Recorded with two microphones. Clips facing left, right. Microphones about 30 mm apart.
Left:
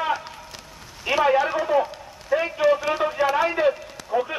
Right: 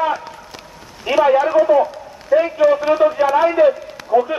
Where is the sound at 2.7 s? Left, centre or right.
Centre.